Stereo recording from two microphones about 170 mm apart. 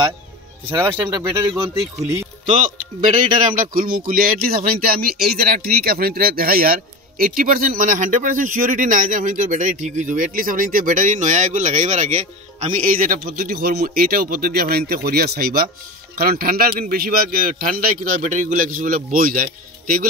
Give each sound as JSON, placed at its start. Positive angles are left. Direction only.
{"t": 0.7, "sound": "speech", "side_deg": -10}
{"t": 1.0, "sound": "speech", "side_deg": -20}
{"t": 3.7, "sound": "speech", "side_deg": -55}